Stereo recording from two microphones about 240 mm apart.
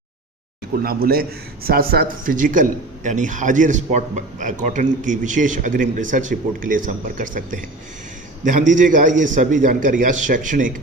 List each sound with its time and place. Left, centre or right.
0.8 s speech: right
8.7 s speech: right